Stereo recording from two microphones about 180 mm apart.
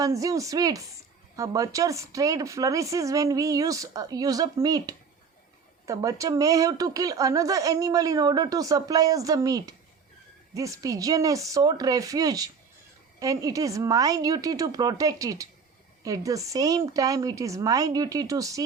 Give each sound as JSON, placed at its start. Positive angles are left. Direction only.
{"t": 0.0, "sound": "speech", "side_deg": -20}